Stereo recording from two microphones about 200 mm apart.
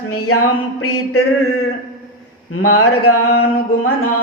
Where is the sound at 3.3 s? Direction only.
50° left (ahead or behind).